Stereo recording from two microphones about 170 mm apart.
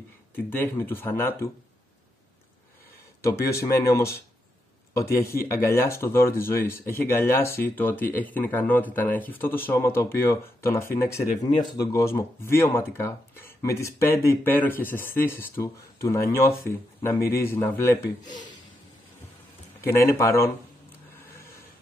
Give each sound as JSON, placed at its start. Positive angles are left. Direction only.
{"t": 0.5, "sound": "speech", "side_deg": 10}
{"t": 3.2, "sound": "speech", "side_deg": 15}
{"t": 19.8, "sound": "speech", "side_deg": 15}